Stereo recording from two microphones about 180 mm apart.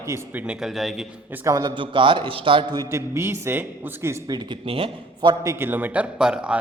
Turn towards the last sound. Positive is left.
turn(degrees=-5)  # may be behind; listen again after turning